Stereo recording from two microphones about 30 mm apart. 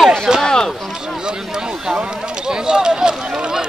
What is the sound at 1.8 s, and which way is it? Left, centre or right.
Speech, right.